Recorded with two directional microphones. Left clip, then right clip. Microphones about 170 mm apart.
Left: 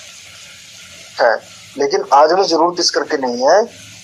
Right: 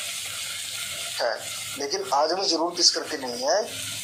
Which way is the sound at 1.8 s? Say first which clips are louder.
Left 13 dB; 45° left (ahead or behind).